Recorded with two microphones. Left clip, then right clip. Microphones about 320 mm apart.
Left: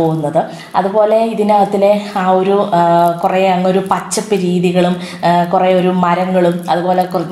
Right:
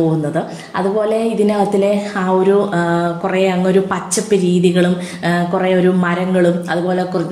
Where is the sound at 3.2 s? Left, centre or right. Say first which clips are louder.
Left 4 dB; centre.